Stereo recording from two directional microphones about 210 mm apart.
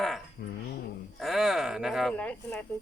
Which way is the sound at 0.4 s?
50° left (ahead or behind).